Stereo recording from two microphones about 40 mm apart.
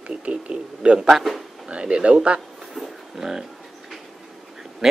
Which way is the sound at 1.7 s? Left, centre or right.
Right.